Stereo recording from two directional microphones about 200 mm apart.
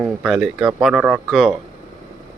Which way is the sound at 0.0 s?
Centre (ahead or behind).